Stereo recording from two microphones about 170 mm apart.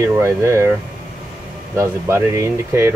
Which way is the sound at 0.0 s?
15° right (ahead or behind).